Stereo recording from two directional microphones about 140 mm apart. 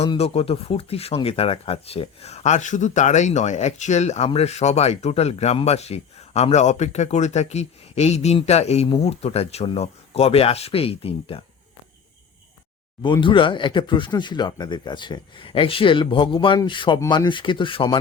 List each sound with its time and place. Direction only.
0.0 s speech: 45° left (ahead or behind)
13.0 s speech: 35° left (ahead or behind)